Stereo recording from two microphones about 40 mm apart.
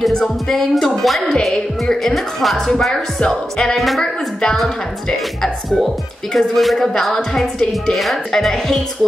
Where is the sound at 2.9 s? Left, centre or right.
Centre.